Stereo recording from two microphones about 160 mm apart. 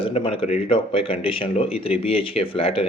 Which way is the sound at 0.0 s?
35° left (ahead or behind).